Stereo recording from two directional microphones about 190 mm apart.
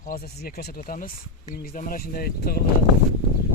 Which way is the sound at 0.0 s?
50° left (ahead or behind).